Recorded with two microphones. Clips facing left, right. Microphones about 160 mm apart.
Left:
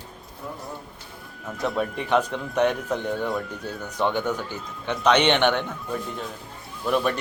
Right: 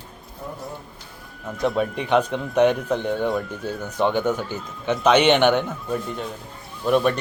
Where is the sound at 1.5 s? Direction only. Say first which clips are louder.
Right 4 dB; centre (ahead or behind).